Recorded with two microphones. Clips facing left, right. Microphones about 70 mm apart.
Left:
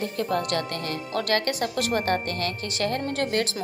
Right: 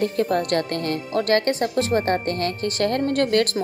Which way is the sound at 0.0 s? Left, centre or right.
Right.